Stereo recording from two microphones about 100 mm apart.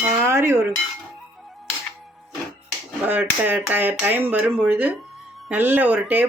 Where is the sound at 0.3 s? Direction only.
25° right (ahead or behind).